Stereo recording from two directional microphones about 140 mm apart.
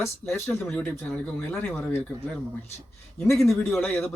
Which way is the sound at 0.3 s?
15° left (ahead or behind).